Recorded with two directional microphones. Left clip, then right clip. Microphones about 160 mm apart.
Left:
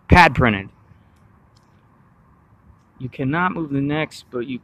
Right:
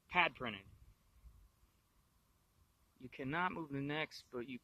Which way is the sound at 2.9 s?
30° right (ahead or behind).